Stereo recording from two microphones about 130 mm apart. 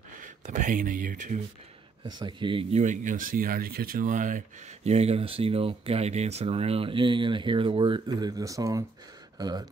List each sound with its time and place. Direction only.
0.1 s speech: 80° right
2.0 s speech: 35° right (ahead or behind)
2.7 s speech: 70° right (ahead or behind); by 9.7 s 30° right (ahead or behind)